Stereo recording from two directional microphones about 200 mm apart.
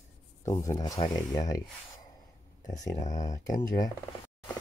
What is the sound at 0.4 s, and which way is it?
Speech, 15° left (ahead or behind).